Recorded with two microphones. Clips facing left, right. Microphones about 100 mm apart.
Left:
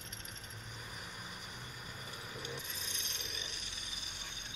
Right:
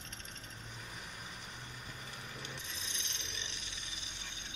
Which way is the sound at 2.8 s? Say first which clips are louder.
Even; 45° left (ahead or behind).